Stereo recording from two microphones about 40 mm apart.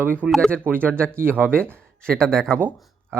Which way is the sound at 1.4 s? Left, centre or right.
Right.